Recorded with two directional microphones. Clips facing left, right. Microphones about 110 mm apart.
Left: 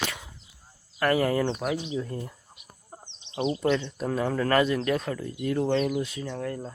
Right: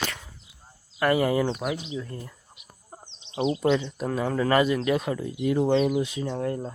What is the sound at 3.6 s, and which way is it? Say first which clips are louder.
Speech: right 2 dB; 10° right (ahead or behind).